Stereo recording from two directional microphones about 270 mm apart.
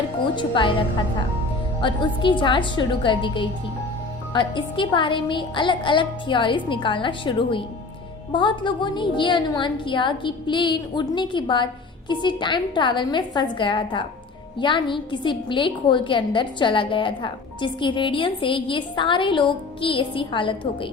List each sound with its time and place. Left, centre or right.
0.3 s a woman's voice: centre